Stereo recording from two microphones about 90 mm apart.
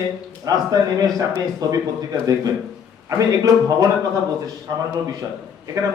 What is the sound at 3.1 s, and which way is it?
Speech, 40° right (ahead or behind).